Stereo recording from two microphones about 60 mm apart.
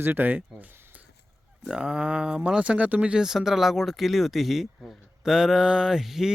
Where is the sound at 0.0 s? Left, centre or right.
Right.